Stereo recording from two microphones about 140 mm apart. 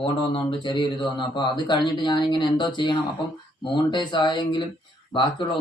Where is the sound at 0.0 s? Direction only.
35° left (ahead or behind).